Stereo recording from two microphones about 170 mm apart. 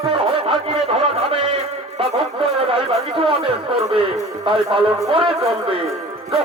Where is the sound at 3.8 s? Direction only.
35° right (ahead or behind).